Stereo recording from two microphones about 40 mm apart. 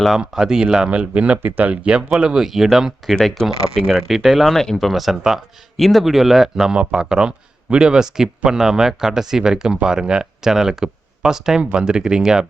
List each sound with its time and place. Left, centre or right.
0.2 s speech: centre
0.9 s speech: right
2.4 s speech: centre
3.1 s speech: centre
3.4 s speech: centre
4.5 s speech: centre
4.8 s speech: centre
6.7 s speech: centre
11.6 s speech: right